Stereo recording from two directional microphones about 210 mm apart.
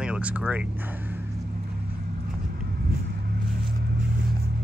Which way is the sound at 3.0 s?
45° right (ahead or behind).